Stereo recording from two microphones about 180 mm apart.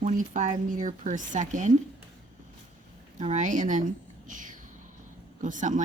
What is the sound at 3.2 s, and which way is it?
Speech, 40° right (ahead or behind).